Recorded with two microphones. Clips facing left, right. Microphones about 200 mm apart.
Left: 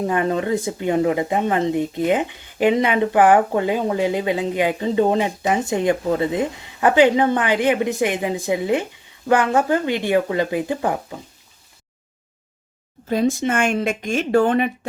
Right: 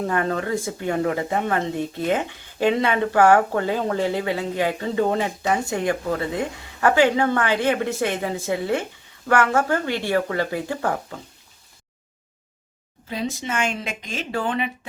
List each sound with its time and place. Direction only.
0.0 s speech: 15° left (ahead or behind)
13.1 s speech: 50° left (ahead or behind)